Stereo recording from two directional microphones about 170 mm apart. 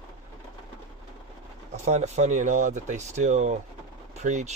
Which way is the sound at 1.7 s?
40° right (ahead or behind).